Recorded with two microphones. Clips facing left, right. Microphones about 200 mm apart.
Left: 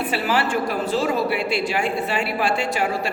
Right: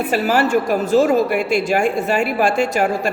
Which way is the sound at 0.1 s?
45° right (ahead or behind).